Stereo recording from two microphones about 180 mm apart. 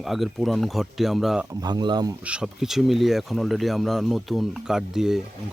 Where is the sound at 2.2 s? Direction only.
5° right (ahead or behind).